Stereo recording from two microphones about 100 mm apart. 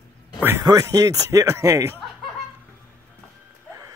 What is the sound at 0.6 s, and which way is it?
Speech, 35° right (ahead or behind).